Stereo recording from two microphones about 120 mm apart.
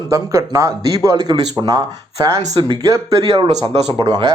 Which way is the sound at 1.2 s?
35° right (ahead or behind).